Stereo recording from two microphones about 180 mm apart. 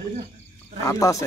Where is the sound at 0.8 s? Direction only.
20° left (ahead or behind).